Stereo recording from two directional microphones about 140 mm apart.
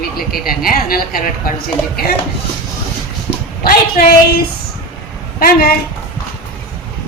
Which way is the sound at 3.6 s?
90° left.